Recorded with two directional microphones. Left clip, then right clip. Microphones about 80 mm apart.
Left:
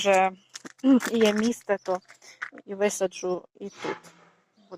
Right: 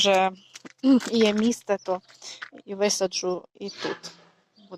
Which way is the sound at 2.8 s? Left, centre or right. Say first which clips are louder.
Right 2 dB; right.